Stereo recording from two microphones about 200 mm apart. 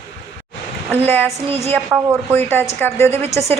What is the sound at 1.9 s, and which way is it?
Speech, 10° right (ahead or behind).